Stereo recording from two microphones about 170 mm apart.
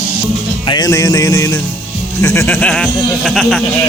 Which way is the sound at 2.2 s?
15° left (ahead or behind).